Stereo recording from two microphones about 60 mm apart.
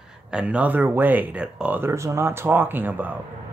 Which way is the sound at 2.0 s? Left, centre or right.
Right.